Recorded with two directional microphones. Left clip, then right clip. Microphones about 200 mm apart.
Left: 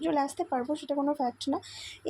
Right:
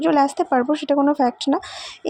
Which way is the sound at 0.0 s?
25° right (ahead or behind).